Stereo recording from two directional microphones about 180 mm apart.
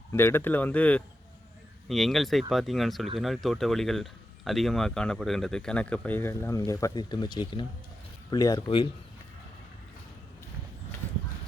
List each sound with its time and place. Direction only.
0.1 s speech: 15° left (ahead or behind)